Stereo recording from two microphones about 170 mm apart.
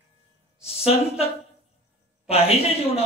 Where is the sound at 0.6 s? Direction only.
35° left (ahead or behind).